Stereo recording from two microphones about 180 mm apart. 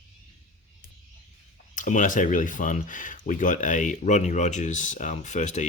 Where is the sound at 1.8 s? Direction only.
45° left (ahead or behind).